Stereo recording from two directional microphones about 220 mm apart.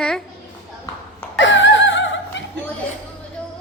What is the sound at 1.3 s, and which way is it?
Laughter, 55° left (ahead or behind).